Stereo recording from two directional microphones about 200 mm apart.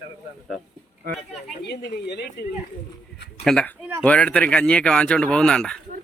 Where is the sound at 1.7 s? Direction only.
55° left (ahead or behind).